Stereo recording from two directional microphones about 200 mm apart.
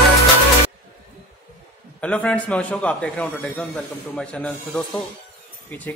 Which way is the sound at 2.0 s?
5° left (ahead or behind).